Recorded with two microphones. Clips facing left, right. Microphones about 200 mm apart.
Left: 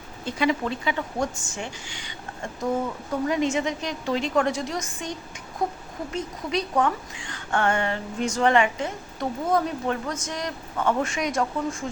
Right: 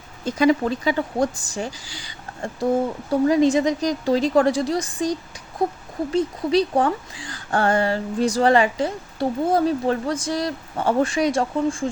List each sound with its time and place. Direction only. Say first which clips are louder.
0.3 s a woman's voice: right 6 dB; 40° right (ahead or behind)
6.1 s a woman's voice: right 9 dB; 35° right (ahead or behind)